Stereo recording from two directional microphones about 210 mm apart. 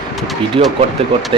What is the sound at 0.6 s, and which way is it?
Speech, 25° right (ahead or behind).